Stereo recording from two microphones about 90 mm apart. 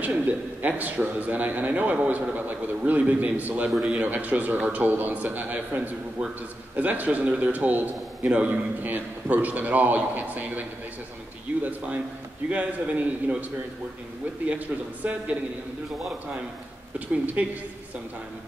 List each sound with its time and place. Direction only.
0.0 s a man's voice: 20° right (ahead or behind)
12.4 s a man's voice: 15° right (ahead or behind)
15.0 s a man's voice: 15° right (ahead or behind)
17.1 s speech: 20° right (ahead or behind)